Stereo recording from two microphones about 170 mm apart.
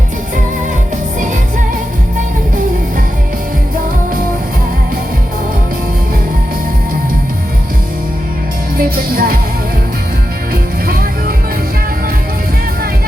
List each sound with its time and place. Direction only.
8.8 s music: 60° right (ahead or behind)
10.5 s music: 60° right (ahead or behind)